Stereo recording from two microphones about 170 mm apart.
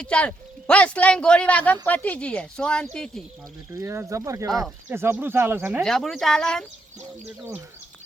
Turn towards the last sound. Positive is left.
turn(degrees=5)  # may be behind; listen again after turning